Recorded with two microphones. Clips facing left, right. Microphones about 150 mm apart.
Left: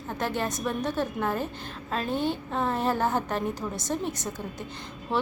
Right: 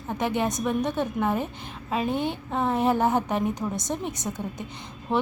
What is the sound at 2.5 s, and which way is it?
A woman's voice, 15° right (ahead or behind).